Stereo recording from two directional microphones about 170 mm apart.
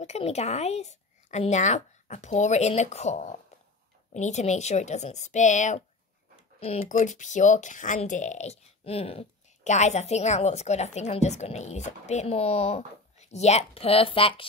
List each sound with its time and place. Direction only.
0.0 s speech: 40° left (ahead or behind)